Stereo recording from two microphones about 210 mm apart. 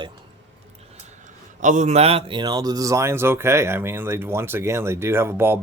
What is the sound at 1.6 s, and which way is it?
Speech, 35° right (ahead or behind).